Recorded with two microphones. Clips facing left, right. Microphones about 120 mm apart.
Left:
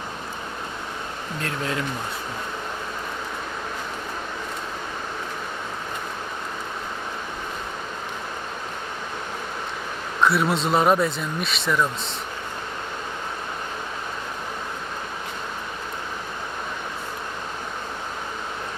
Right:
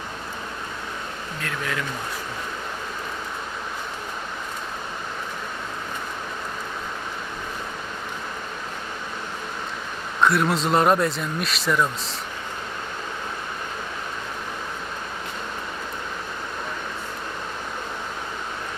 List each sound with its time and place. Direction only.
1.4 s speech: 30° left (ahead or behind)
10.2 s speech: centre (ahead or behind)